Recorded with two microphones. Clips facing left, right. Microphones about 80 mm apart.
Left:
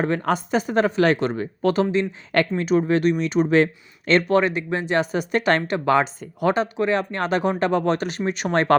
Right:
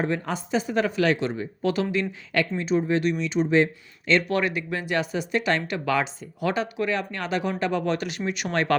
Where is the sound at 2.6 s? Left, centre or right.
Left.